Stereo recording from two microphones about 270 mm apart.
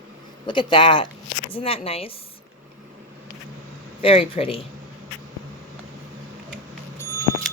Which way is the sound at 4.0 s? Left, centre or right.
Left.